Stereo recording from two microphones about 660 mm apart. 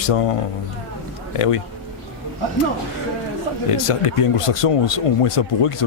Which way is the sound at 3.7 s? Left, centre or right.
Left.